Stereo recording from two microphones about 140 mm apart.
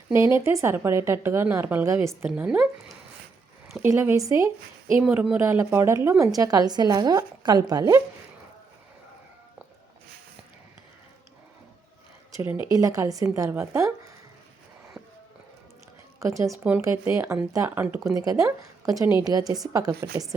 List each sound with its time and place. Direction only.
0.1 s a woman's voice: 20° right (ahead or behind)
3.8 s a woman's voice: 20° right (ahead or behind)
4.9 s a woman's voice: 10° right (ahead or behind); by 8.0 s 25° right (ahead or behind)
12.4 s a woman's voice: 20° right (ahead or behind)
15.0 s music: 10° right (ahead or behind)
16.2 s a woman's voice: 20° right (ahead or behind)